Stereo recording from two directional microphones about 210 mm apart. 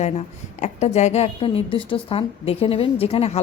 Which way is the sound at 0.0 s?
35° left (ahead or behind).